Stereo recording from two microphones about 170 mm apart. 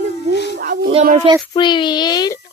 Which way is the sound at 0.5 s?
80° right.